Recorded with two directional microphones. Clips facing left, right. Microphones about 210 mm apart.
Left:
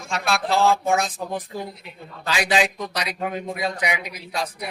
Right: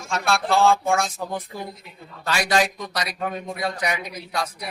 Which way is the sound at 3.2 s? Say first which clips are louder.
Left 1 dB; 20° left (ahead or behind).